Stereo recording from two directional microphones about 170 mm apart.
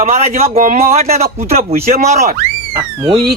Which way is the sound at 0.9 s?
40° right (ahead or behind).